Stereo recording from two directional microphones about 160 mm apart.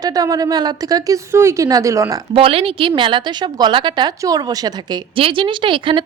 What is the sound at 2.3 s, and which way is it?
A woman's voice, 35° right (ahead or behind).